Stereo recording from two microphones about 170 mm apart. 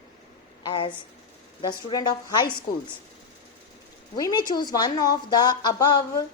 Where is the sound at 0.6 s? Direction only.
25° left (ahead or behind).